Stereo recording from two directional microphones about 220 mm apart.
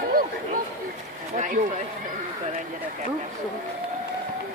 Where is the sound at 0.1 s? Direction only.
40° right (ahead or behind).